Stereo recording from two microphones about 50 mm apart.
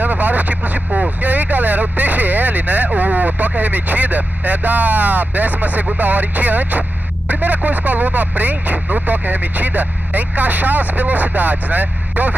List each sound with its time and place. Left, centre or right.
0.0 s vehicle: right
5.9 s speech: right